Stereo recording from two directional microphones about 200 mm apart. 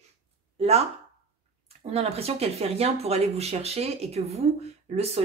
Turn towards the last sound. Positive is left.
turn(degrees=-30)  # may be behind; listen again after turning